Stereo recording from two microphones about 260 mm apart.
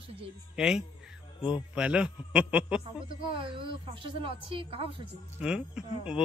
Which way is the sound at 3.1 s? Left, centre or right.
Centre.